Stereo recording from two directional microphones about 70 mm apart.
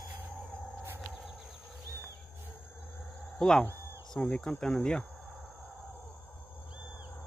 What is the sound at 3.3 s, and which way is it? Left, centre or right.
Speech, centre.